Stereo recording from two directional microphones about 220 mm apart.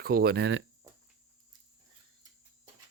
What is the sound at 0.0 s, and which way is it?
Speech, 45° right (ahead or behind).